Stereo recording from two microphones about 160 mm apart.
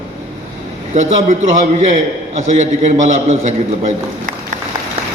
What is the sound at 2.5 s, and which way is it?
A man's voice, 45° right (ahead or behind).